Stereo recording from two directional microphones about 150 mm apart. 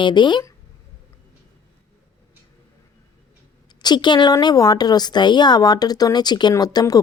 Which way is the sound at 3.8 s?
30° left (ahead or behind).